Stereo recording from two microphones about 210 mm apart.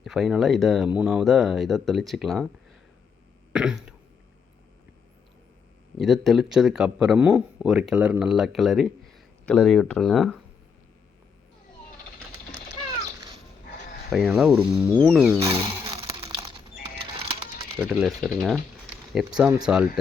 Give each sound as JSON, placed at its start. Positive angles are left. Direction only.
{"t": 0.0, "sound": "speech", "side_deg": 0}
{"t": 3.5, "sound": "throat clearing", "side_deg": -5}
{"t": 6.0, "sound": "speech", "side_deg": 0}
{"t": 14.1, "sound": "speech", "side_deg": 0}
{"t": 16.0, "sound": "a sound", "side_deg": -15}
{"t": 17.7, "sound": "speech", "side_deg": -5}